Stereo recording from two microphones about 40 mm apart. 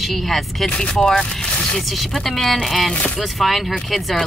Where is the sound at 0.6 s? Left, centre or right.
Centre.